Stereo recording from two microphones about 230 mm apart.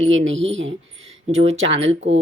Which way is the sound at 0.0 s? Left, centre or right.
Right.